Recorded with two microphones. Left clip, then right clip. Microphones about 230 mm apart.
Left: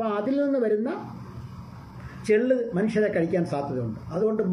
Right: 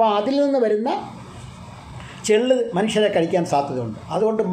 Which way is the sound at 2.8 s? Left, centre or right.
Right.